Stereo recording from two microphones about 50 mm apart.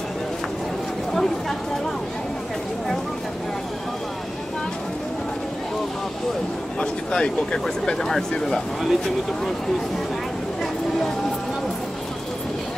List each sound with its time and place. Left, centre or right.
6.8 s speech: centre